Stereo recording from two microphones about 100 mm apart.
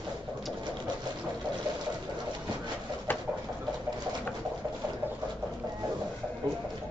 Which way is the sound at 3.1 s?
20° left (ahead or behind).